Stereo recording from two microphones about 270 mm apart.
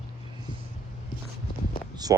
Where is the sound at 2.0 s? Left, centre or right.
Centre.